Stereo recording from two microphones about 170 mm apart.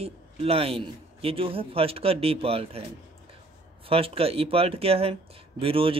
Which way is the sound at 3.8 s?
35° right (ahead or behind).